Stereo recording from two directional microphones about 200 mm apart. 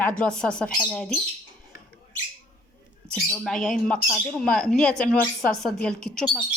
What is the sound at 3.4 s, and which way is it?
Speech, 5° left (ahead or behind).